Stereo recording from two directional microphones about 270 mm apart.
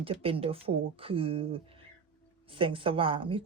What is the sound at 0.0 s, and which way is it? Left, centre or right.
Speech, right.